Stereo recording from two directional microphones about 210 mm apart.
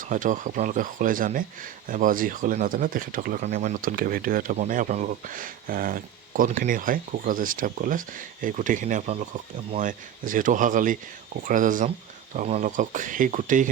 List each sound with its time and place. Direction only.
0.1 s speech: 35° right (ahead or behind)